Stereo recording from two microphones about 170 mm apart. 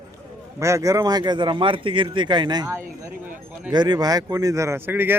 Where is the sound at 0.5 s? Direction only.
15° right (ahead or behind).